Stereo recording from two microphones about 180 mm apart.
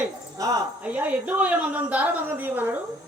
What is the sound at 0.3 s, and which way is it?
A woman's voice, 20° right (ahead or behind).